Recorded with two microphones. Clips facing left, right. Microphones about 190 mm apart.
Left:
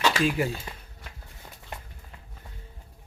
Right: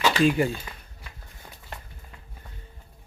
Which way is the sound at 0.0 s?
Centre (ahead or behind).